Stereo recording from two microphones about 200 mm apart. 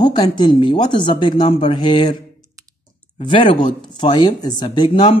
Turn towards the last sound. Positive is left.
turn(degrees=25)  # may be behind; listen again after turning